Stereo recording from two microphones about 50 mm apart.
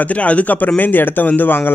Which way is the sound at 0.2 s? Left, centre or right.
Left.